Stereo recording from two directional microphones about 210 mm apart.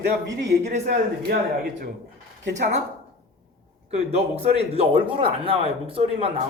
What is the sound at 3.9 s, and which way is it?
A man's voice, 30° right (ahead or behind).